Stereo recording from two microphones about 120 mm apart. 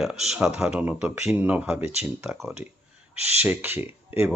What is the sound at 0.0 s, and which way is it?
Speech, 5° right (ahead or behind).